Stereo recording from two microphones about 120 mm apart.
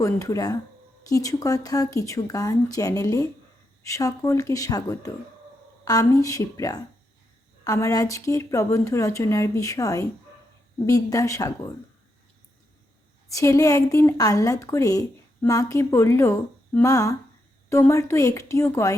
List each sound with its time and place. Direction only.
0.0 s a woman's voice: 25° left (ahead or behind)
13.2 s a woman's voice: 25° left (ahead or behind)